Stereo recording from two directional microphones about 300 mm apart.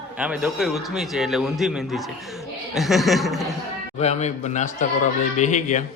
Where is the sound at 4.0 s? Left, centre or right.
Left.